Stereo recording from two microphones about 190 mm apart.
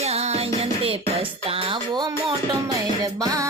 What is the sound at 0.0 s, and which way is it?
Music, 35° right (ahead or behind).